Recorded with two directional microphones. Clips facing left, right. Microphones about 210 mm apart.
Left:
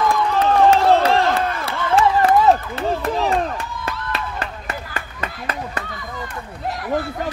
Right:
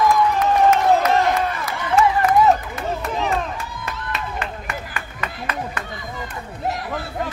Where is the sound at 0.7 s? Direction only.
30° left (ahead or behind).